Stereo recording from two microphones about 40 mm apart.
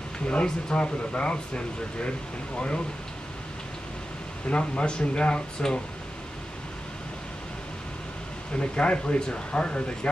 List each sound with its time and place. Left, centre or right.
0.7 s speech: left
4.5 s speech: left
8.5 s speech: left